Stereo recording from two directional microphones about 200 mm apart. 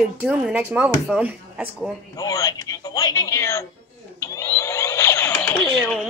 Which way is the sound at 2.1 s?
15° left (ahead or behind).